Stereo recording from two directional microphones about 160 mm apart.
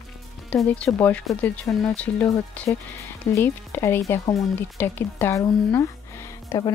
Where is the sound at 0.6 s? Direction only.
15° left (ahead or behind).